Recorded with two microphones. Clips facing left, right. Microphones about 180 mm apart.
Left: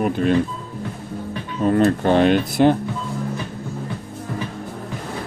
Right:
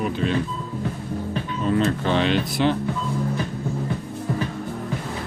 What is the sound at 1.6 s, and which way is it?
Speech, 50° left (ahead or behind).